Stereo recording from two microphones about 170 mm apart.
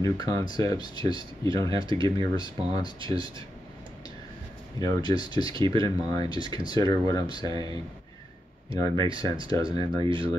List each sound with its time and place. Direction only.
0.0 s speech: 20° left (ahead or behind)
1.7 s speech: 30° right (ahead or behind)
2.3 s speech: 25° left (ahead or behind)
3.0 s speech: 30° right (ahead or behind)
4.7 s speech: 25° left (ahead or behind)
8.7 s speech: 20° left (ahead or behind)
10.0 s speech: 30° right (ahead or behind)